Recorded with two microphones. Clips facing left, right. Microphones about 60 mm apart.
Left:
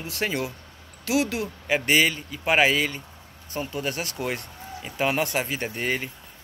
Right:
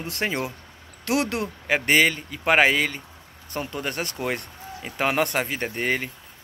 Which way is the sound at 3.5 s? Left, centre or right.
Right.